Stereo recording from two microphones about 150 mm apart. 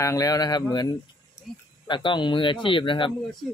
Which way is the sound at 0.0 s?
25° left (ahead or behind).